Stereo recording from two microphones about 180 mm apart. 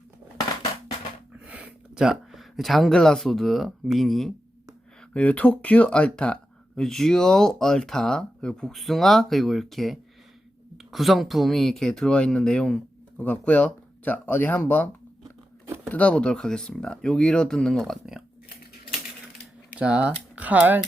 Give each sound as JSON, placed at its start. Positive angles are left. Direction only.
{"t": 1.5, "sound": "speech", "side_deg": -5}
{"t": 15.2, "sound": "crunch", "side_deg": -15}
{"t": 15.9, "sound": "speech", "side_deg": 5}
{"t": 19.7, "sound": "speech", "side_deg": -5}